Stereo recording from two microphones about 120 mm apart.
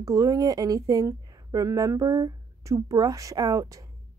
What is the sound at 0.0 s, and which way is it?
Speech, 30° right (ahead or behind).